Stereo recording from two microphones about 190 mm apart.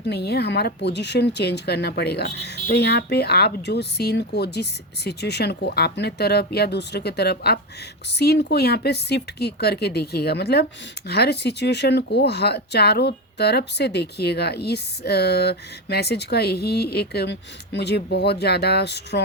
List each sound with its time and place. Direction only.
0.1 s speech: 60° left (ahead or behind)